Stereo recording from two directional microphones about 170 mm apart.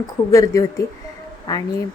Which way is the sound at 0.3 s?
20° left (ahead or behind).